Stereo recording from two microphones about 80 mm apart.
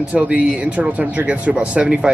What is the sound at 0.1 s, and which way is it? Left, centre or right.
Speech, centre.